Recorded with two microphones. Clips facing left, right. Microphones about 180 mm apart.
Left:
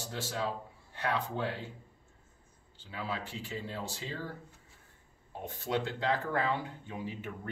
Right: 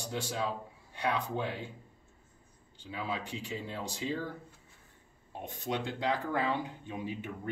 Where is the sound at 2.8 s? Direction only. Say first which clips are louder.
Right 1 dB; 15° right (ahead or behind).